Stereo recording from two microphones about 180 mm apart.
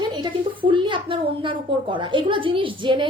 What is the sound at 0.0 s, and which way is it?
Speech, 25° right (ahead or behind).